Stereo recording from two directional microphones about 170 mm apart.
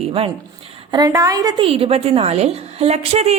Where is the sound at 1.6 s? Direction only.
35° right (ahead or behind).